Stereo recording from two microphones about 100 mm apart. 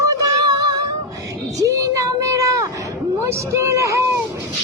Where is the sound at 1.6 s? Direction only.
35° right (ahead or behind).